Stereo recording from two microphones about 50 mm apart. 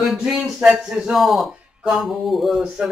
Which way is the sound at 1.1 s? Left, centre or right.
Centre.